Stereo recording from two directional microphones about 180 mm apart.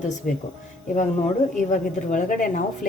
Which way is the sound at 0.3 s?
45° left (ahead or behind).